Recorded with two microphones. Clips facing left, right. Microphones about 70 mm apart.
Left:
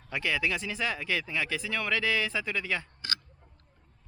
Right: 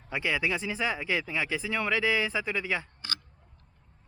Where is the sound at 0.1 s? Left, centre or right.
Right.